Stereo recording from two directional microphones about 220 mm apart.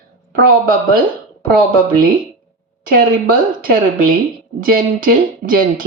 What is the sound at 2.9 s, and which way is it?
Speech, 40° right (ahead or behind).